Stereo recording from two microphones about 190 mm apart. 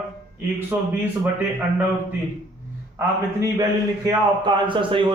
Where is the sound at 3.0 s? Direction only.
20° right (ahead or behind).